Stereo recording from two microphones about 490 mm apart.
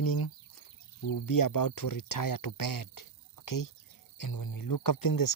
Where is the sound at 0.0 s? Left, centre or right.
Left.